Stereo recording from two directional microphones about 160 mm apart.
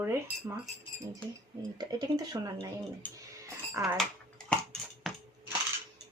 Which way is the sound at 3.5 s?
15° right (ahead or behind).